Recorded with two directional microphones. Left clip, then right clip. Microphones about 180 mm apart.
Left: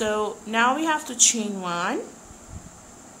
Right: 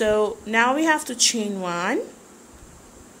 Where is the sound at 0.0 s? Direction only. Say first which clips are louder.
Right 5 dB; 20° right (ahead or behind).